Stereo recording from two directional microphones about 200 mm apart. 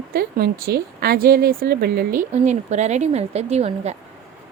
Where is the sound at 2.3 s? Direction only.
35° right (ahead or behind).